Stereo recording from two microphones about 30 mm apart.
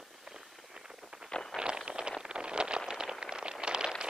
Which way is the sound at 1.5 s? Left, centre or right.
Left.